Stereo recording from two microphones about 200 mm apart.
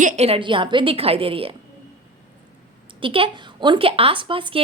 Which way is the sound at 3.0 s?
25° right (ahead or behind).